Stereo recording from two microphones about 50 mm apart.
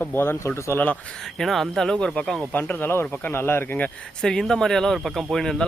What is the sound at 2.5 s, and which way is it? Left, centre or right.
Speech, left.